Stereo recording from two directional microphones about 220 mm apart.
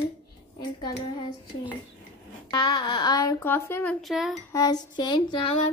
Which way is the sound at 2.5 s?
20° left (ahead or behind).